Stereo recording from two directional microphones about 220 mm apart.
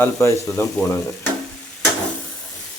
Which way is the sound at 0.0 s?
10° left (ahead or behind).